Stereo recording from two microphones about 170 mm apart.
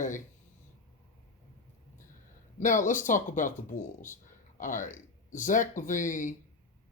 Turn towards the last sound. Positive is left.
turn(degrees=50)  # may be behind; listen again after turning